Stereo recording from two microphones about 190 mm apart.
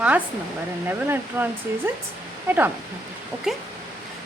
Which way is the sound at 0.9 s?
10° right (ahead or behind).